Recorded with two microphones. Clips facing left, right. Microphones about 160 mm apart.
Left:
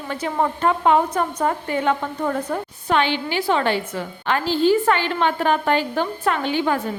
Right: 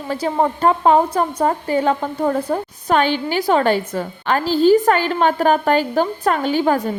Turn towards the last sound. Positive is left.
turn(degrees=-40)  # may be behind; listen again after turning